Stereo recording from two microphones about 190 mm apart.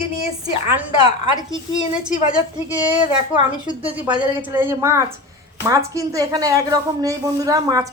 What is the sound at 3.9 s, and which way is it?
A woman's voice, 10° right (ahead or behind).